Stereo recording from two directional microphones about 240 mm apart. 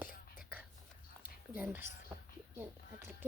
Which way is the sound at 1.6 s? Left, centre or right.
Centre.